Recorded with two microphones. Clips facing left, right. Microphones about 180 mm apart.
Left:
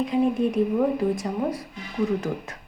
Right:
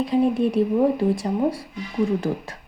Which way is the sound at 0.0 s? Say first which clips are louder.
Right 2 dB; 35° right (ahead or behind).